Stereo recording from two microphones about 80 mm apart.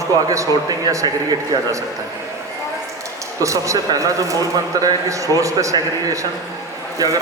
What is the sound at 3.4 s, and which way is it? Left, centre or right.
A man's voice, right.